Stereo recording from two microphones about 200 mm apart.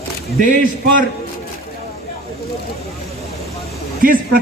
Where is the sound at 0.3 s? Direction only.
45° right (ahead or behind).